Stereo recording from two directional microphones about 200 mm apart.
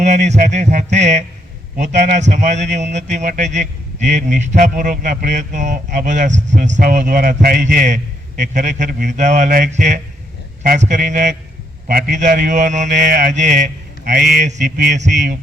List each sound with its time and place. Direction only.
0.0 s a man's voice: 35° right (ahead or behind)